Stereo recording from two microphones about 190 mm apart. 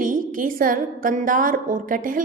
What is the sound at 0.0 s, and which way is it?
A woman's voice, 45° right (ahead or behind).